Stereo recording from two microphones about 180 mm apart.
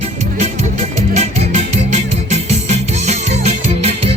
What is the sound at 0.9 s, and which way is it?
Music, 40° right (ahead or behind).